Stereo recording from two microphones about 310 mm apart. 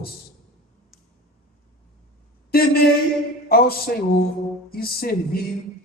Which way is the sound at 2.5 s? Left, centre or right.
Left.